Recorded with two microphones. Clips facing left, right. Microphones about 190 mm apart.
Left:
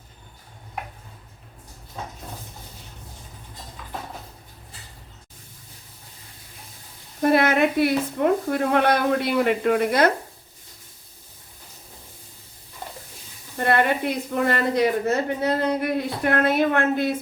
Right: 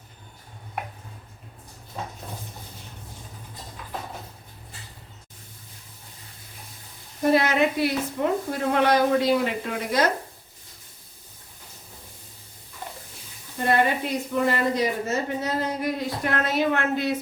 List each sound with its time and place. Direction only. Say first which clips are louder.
7.2 s speech: left 2 dB; 55° left (ahead or behind)
13.6 s speech: left 1 dB; 60° left (ahead or behind)